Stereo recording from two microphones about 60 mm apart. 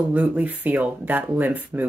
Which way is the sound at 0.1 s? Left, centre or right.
Right.